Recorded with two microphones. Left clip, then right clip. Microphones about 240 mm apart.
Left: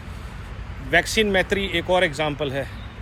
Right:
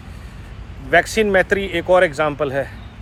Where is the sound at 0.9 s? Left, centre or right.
Right.